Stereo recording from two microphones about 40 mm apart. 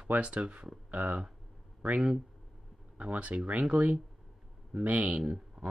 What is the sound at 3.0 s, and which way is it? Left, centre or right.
Speech, right.